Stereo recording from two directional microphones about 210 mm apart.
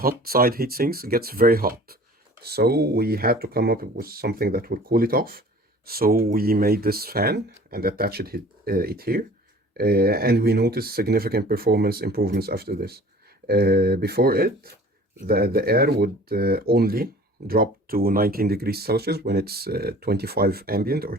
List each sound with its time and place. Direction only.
0.0 s speech: 45° right (ahead or behind)